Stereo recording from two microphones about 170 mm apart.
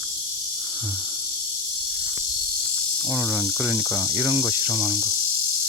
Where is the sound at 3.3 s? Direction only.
5° right (ahead or behind).